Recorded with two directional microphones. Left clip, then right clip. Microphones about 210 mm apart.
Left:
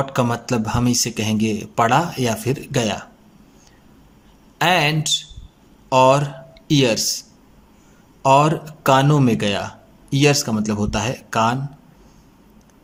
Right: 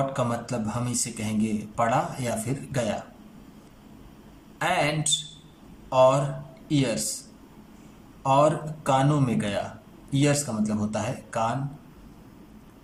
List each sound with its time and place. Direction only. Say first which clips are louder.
0.1 s speech: left 7 dB; 45° left (ahead or behind)
4.5 s speech: left 8 dB; 45° left (ahead or behind)
8.2 s speech: left 6 dB; 45° left (ahead or behind)